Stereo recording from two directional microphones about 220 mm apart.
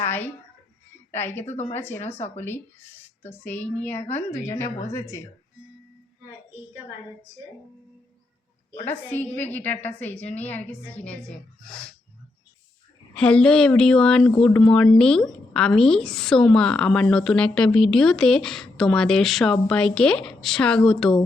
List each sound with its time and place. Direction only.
0.0 s a sound: 10° left (ahead or behind)
1.1 s a woman's voice: 10° left (ahead or behind)
2.1 s speech: 30° left (ahead or behind)
3.2 s a woman's voice: 10° left (ahead or behind)
8.8 s a woman's voice: 10° left (ahead or behind)
13.1 s a woman's voice: 5° left (ahead or behind)